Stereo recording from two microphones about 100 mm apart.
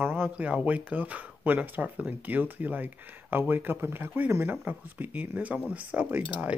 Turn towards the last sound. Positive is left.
turn(degrees=-15)  # may be behind; listen again after turning